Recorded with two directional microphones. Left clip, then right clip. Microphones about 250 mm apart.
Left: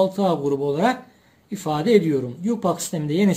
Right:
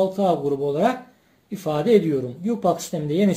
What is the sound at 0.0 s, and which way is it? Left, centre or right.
Speech, left.